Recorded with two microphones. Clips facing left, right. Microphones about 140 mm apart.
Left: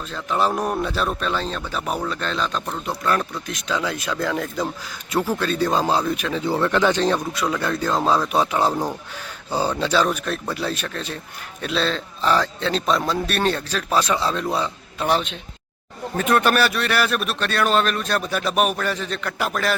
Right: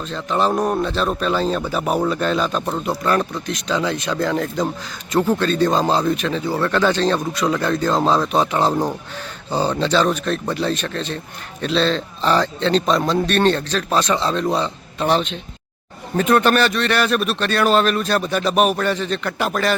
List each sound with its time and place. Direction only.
0.0 s speech: 5° left (ahead or behind)
6.4 s speech: 20° left (ahead or behind)
7.3 s speech: 5° left (ahead or behind)
8.7 s speech: 10° right (ahead or behind)
9.5 s speech: 10° left (ahead or behind)